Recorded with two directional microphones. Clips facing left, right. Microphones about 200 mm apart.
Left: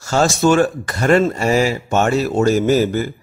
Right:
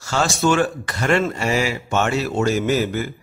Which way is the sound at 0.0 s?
40° left (ahead or behind).